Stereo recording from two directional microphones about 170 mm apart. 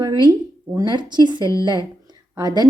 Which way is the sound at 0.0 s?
25° right (ahead or behind).